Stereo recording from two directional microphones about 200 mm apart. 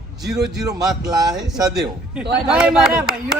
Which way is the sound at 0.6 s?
20° right (ahead or behind).